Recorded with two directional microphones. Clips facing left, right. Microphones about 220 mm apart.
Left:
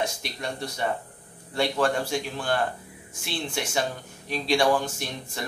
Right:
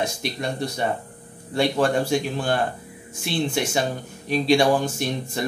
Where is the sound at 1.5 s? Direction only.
15° right (ahead or behind).